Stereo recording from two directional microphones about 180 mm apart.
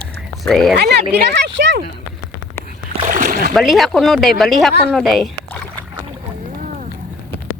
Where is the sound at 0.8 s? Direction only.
65° right (ahead or behind).